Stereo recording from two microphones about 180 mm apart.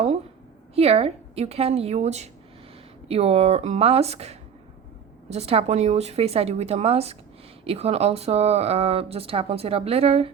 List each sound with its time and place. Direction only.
0.8 s speech: 35° right (ahead or behind)